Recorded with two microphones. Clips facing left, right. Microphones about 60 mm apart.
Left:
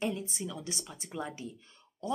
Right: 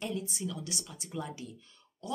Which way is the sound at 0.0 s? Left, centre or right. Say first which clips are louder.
Left 2 dB; left.